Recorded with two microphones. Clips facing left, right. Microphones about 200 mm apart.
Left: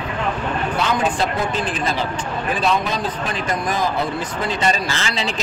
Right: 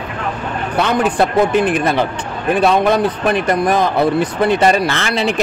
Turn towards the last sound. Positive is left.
turn(degrees=-60)  # may be behind; listen again after turning